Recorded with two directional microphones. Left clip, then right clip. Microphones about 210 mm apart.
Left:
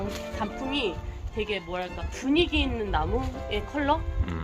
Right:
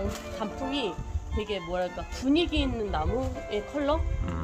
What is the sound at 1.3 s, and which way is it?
Speech, 50° right (ahead or behind).